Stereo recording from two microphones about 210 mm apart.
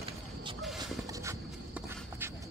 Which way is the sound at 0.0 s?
25° right (ahead or behind).